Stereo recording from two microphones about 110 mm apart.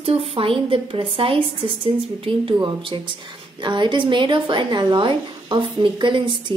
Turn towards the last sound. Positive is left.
turn(degrees=-45)  # may be behind; listen again after turning